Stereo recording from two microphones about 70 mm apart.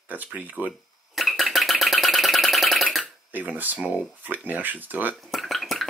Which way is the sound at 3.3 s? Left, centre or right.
Right.